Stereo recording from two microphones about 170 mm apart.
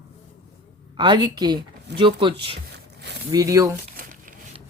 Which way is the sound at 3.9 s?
55° right (ahead or behind).